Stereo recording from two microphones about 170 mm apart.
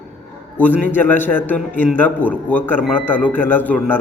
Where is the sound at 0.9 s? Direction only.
10° left (ahead or behind).